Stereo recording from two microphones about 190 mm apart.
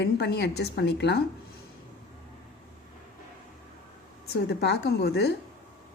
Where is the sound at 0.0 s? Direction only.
60° left (ahead or behind).